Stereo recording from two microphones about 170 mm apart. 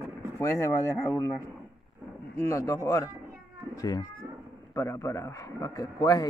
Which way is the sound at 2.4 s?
15° left (ahead or behind).